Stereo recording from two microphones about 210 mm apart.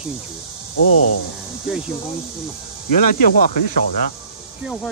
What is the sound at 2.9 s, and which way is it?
Speech, 40° left (ahead or behind).